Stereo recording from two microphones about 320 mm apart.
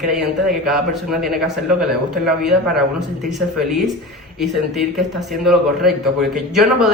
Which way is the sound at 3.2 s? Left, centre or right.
Centre.